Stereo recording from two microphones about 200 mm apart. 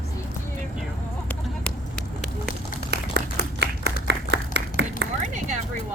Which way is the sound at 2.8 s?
55° right (ahead or behind).